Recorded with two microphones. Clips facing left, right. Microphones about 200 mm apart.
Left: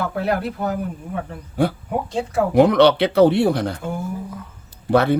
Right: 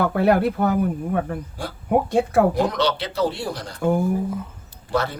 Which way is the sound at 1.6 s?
60° left (ahead or behind).